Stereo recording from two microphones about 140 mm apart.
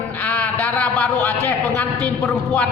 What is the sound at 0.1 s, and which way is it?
A man's voice, 10° left (ahead or behind).